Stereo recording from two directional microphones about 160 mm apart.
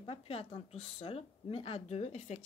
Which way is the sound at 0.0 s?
35° left (ahead or behind).